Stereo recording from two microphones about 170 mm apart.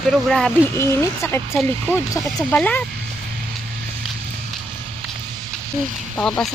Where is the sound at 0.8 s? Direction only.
15° left (ahead or behind).